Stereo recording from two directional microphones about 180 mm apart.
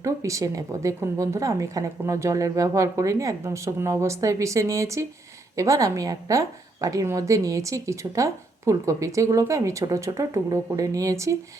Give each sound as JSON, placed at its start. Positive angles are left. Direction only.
{"t": 0.0, "sound": "a woman's voice", "side_deg": -15}